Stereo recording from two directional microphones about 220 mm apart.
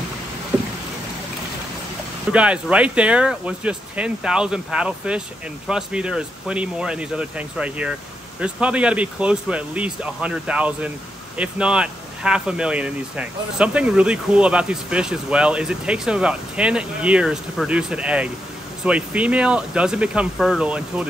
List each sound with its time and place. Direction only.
2.3 s speech: 5° right (ahead or behind)